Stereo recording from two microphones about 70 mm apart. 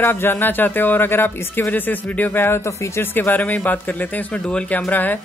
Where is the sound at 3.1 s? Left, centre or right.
Left.